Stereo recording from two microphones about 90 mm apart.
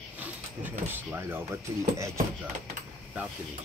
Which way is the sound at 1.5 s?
35° right (ahead or behind).